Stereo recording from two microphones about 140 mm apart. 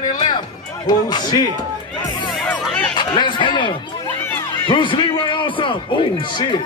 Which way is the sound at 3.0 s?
35° left (ahead or behind).